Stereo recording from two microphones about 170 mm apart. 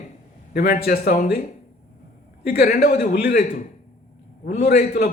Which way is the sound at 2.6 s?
65° left (ahead or behind).